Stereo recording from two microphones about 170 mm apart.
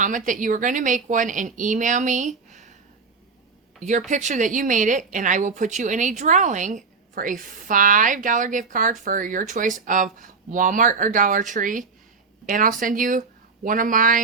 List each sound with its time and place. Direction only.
0.0 s a woman's voice: 50° right (ahead or behind)
3.8 s a woman's voice: 45° right (ahead or behind)